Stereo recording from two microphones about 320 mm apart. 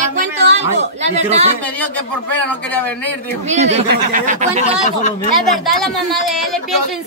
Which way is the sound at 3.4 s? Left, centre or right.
Right.